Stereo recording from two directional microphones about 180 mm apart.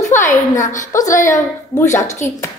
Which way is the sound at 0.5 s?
45° left (ahead or behind).